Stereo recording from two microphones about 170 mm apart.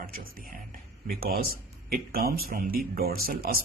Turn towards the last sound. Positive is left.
turn(degrees=-60)  # may be behind; listen again after turning